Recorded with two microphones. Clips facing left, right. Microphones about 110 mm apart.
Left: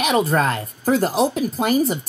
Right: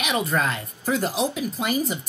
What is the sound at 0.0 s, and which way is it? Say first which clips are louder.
Speech: left 6 dB; 40° left (ahead or behind).